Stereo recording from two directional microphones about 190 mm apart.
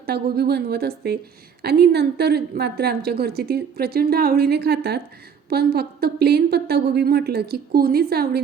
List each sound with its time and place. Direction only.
0.0 s a woman's voice: 55° right (ahead or behind)